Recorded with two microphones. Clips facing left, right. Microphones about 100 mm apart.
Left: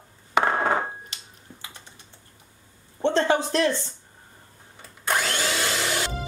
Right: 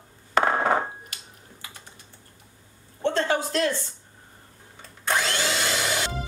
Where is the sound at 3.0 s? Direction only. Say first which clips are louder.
Left 3 dB; 20° left (ahead or behind).